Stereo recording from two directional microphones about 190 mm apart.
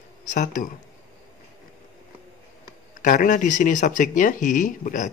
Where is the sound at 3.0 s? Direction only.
45° left (ahead or behind).